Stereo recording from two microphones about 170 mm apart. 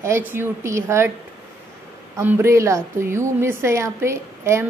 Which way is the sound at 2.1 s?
15° right (ahead or behind).